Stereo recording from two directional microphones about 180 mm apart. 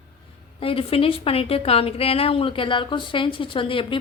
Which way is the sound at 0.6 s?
30° left (ahead or behind).